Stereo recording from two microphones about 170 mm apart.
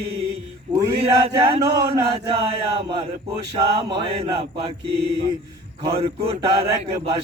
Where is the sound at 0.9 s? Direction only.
35° right (ahead or behind).